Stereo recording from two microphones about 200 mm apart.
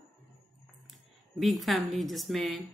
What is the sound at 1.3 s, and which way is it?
A woman's voice, centre (ahead or behind).